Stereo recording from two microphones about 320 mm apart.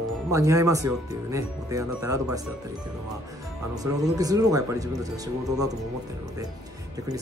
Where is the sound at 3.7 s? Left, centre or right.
Centre.